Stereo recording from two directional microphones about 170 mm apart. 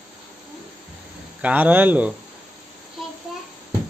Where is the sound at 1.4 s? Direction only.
10° right (ahead or behind).